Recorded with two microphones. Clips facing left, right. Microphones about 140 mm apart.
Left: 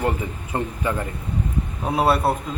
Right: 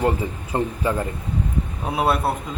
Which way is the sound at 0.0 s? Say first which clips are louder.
Right 2 dB; 30° right (ahead or behind).